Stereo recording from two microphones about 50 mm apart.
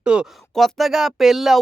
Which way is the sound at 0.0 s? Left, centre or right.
Centre.